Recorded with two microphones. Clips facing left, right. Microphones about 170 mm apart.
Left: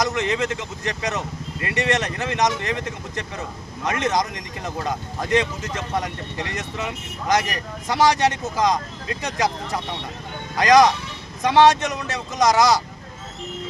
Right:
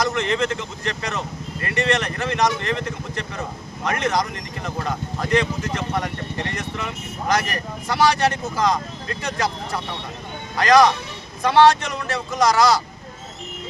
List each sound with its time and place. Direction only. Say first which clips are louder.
0.0 s speech: right 1 dB; 20° left (ahead or behind)